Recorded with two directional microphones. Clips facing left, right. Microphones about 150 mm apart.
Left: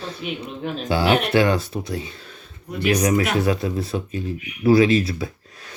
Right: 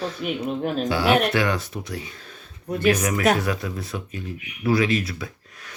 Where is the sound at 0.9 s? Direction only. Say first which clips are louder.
Left 2 dB; 25° left (ahead or behind).